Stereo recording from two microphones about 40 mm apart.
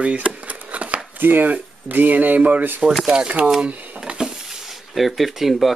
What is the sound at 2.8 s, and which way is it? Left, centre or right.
Speech, right.